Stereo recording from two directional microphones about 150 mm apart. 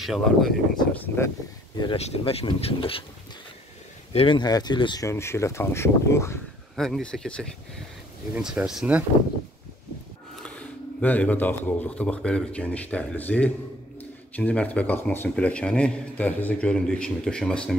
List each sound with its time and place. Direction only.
0.0 s speech: centre (ahead or behind)
1.0 s speech: 15° left (ahead or behind)
2.0 s speech: 45° left (ahead or behind)
4.1 s speech: 35° left (ahead or behind)
5.0 s speech: 15° left (ahead or behind)
6.8 s speech: 5° left (ahead or behind)
8.4 s speech: 5° right (ahead or behind)
10.4 s speech: 10° left (ahead or behind)